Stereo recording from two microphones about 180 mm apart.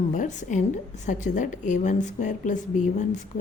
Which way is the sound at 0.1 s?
45° left (ahead or behind).